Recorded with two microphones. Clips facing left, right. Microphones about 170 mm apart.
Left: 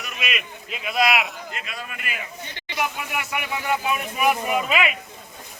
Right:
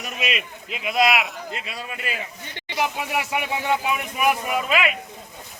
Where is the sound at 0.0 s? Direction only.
30° right (ahead or behind).